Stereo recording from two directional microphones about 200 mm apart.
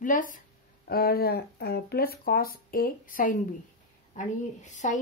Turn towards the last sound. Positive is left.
turn(degrees=35)  # may be behind; listen again after turning